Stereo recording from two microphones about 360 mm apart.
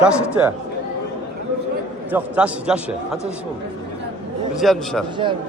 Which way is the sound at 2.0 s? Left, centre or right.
Centre.